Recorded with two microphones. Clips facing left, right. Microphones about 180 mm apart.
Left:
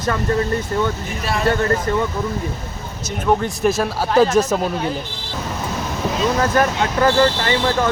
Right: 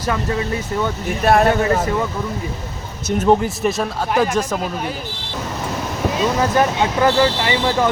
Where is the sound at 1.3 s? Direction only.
60° right (ahead or behind).